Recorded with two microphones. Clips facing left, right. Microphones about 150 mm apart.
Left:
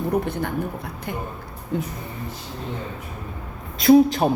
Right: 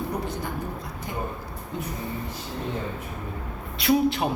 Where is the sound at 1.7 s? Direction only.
60° left (ahead or behind).